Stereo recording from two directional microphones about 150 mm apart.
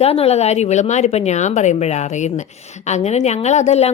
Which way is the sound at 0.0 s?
40° left (ahead or behind).